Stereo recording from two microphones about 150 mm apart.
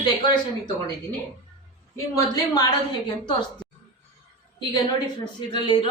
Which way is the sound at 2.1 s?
25° left (ahead or behind).